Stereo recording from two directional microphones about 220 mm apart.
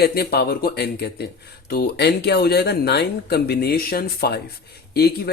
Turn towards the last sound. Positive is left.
turn(degrees=45)  # may be behind; listen again after turning